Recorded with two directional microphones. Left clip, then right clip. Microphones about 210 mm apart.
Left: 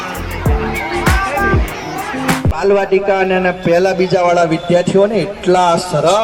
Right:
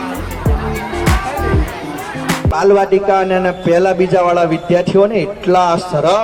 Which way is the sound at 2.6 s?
40° left (ahead or behind).